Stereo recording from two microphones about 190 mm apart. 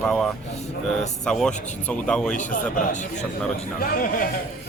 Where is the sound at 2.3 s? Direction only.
40° left (ahead or behind).